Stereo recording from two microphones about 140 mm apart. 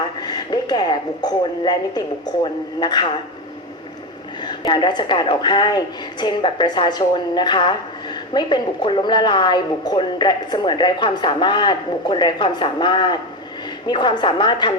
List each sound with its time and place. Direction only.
0.2 s a woman's voice: 30° left (ahead or behind)
4.4 s a woman's voice: 35° left (ahead or behind)